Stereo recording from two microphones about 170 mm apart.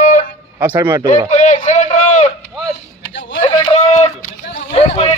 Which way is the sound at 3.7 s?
40° left (ahead or behind).